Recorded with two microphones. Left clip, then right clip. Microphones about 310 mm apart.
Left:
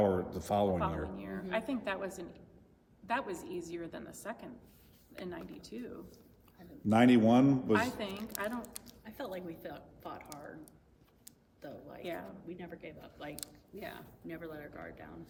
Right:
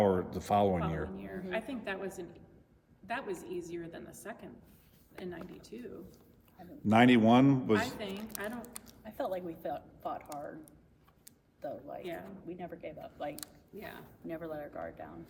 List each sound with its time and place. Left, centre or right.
0.0 s speech: right
1.1 s a woman's voice: centre
6.6 s a man's voice: right
7.8 s a woman's voice: centre
8.8 s speech: centre
11.6 s a woman's voice: centre
14.3 s speech: centre